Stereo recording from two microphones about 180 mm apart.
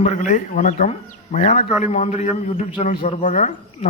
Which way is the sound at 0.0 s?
40° left (ahead or behind).